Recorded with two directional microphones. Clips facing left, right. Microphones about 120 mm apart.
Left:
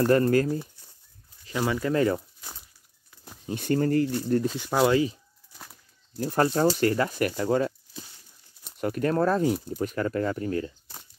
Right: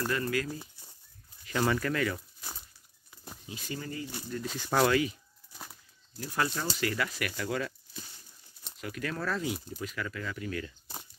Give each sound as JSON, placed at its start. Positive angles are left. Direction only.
{"t": 0.0, "sound": "speech", "side_deg": 45}
{"t": 1.5, "sound": "speech", "side_deg": 10}
{"t": 1.9, "sound": "speech", "side_deg": 35}
{"t": 3.4, "sound": "speech", "side_deg": 55}
{"t": 4.5, "sound": "speech", "side_deg": 10}
{"t": 4.8, "sound": "speech", "side_deg": 30}
{"t": 6.1, "sound": "speech", "side_deg": 45}
{"t": 10.9, "sound": "a sound", "side_deg": -15}